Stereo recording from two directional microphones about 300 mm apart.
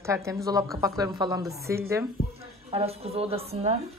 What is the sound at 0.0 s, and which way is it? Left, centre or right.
A woman's voice, centre.